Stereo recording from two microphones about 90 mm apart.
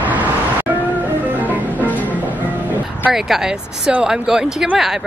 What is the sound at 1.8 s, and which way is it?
Music, 20° left (ahead or behind).